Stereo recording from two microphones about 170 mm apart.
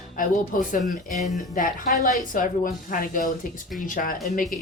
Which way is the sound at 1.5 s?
50° left (ahead or behind).